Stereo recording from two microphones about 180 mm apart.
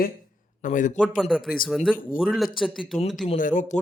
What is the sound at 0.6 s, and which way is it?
Speech, 45° left (ahead or behind).